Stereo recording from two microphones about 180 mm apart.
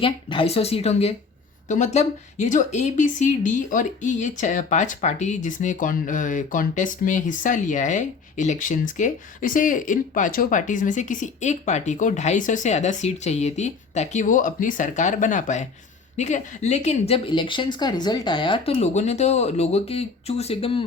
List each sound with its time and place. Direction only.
0.0 s speech: 30° left (ahead or behind)